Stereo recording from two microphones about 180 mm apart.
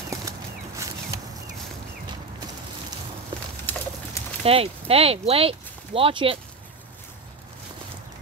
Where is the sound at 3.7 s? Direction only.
10° left (ahead or behind).